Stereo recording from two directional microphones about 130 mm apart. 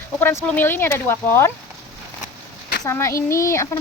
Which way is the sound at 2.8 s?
20° left (ahead or behind).